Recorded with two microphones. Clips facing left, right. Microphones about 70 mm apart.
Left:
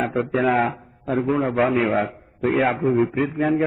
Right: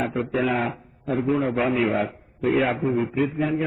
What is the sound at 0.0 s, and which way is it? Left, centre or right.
A man's voice, left.